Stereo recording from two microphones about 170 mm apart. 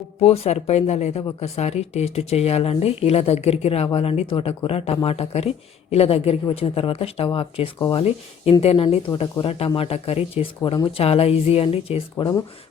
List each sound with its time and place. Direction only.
0.2 s speech: 35° left (ahead or behind)
8.6 s speech: 35° left (ahead or behind)
10.6 s speech: 25° left (ahead or behind)
12.1 s speech: 20° left (ahead or behind)